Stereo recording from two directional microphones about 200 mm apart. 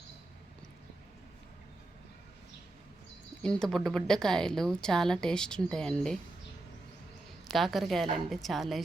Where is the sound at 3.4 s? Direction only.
5° left (ahead or behind).